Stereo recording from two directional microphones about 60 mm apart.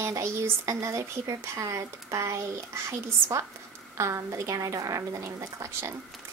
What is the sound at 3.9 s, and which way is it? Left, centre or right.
A woman's voice, right.